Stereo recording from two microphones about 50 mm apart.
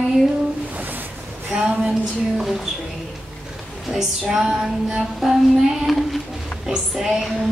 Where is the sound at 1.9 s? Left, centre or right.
Centre.